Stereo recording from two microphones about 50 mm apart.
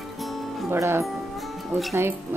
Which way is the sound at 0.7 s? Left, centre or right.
Right.